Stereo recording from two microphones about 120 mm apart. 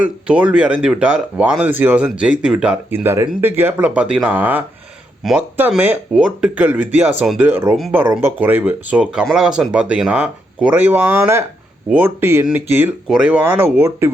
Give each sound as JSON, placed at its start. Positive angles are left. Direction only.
{"t": 0.0, "sound": "speech", "side_deg": -10}
{"t": 3.0, "sound": "speech", "side_deg": -20}
{"t": 5.2, "sound": "speech", "side_deg": -5}
{"t": 5.5, "sound": "speech", "side_deg": -15}